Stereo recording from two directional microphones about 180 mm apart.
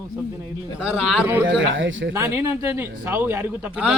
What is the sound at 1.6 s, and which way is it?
Speech, 90° right.